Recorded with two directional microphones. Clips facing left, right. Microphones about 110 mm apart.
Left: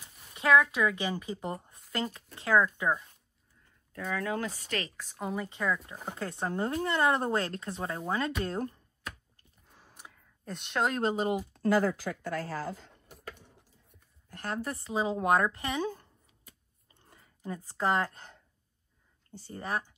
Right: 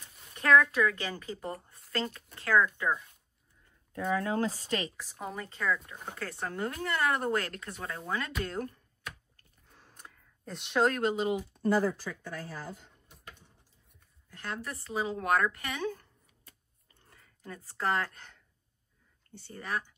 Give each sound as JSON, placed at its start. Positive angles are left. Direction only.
{"t": 0.3, "sound": "a woman's voice", "side_deg": 10}
{"t": 3.9, "sound": "speech", "side_deg": -25}
{"t": 4.9, "sound": "speech", "side_deg": 0}
{"t": 5.5, "sound": "speech", "side_deg": 15}
{"t": 9.7, "sound": "a sound", "side_deg": 5}
{"t": 11.0, "sound": "speech", "side_deg": 35}
{"t": 11.6, "sound": "speech", "side_deg": 90}
{"t": 14.5, "sound": "speech", "side_deg": 35}
{"t": 14.8, "sound": "speech", "side_deg": 20}
{"t": 17.1, "sound": "speech", "side_deg": 20}